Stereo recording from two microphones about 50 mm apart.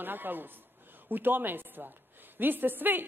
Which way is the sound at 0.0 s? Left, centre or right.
Right.